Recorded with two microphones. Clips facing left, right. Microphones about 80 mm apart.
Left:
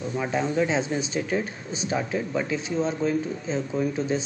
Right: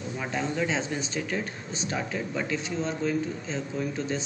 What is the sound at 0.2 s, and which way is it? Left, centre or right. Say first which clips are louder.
Speech: left 5 dB; centre.